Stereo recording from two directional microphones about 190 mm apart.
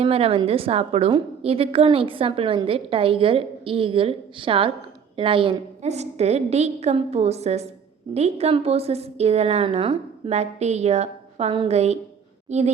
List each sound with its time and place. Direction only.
0.0 s a woman's voice: 30° right (ahead or behind)